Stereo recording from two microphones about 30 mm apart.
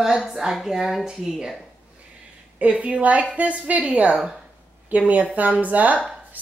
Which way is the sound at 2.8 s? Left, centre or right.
Right.